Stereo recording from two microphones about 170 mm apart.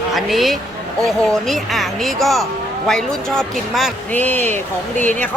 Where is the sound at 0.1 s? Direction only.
Centre (ahead or behind).